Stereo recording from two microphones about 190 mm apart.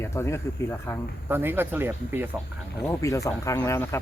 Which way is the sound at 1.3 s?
10° right (ahead or behind).